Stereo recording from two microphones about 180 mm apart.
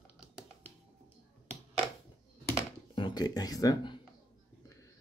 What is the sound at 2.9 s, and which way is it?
Speech, 25° left (ahead or behind).